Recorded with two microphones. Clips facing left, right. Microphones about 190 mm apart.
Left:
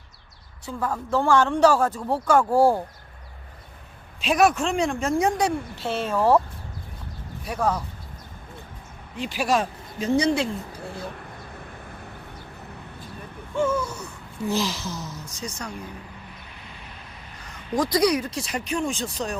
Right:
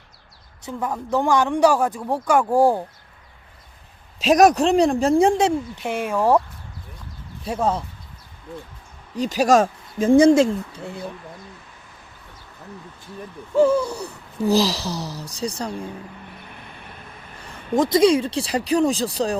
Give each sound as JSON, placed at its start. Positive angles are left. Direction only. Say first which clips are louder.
{"t": 0.6, "sound": "speech", "louder": "right 1 dB", "side_deg": -20}
{"t": 4.2, "sound": "speech", "louder": "right 6 dB", "side_deg": -40}
{"t": 7.4, "sound": "speech", "louder": "right 3 dB", "side_deg": -25}
{"t": 9.1, "sound": "speech", "louder": "right 7 dB", "side_deg": -40}
{"t": 10.7, "sound": "speech", "louder": "right 2 dB", "side_deg": -20}
{"t": 13.6, "sound": "speech", "louder": "right 7 dB", "side_deg": -30}
{"t": 16.5, "sound": "music", "louder": "right 3 dB", "side_deg": -55}
{"t": 17.7, "sound": "speech", "louder": "right 5 dB", "side_deg": -25}